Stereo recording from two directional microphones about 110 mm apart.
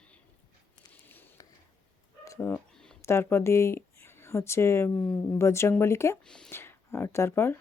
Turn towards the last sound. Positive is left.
turn(degrees=25)  # may be behind; listen again after turning